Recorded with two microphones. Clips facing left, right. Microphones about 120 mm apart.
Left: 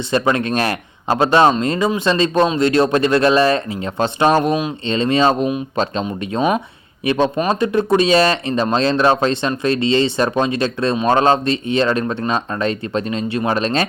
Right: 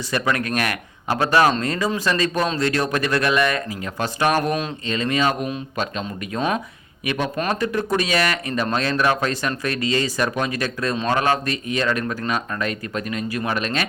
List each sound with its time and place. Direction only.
0.1 s speech: 25° left (ahead or behind)
4.9 s speech: 30° left (ahead or behind)
7.3 s speech: 20° left (ahead or behind)